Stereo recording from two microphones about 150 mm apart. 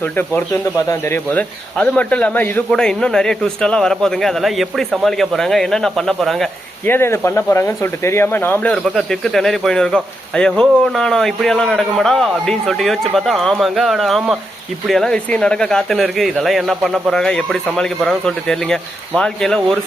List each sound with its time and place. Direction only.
0.0 s speech: 15° left (ahead or behind)
6.8 s speech: 15° left (ahead or behind)
8.7 s speech: 5° left (ahead or behind)